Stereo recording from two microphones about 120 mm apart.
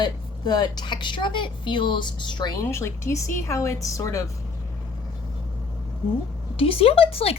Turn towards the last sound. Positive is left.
turn(degrees=55)  # may be behind; listen again after turning